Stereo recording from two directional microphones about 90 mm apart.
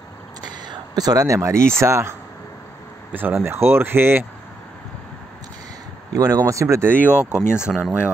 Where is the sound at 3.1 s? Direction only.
20° right (ahead or behind).